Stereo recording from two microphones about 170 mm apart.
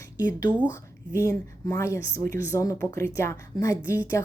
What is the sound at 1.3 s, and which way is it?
A woman's voice, 20° left (ahead or behind).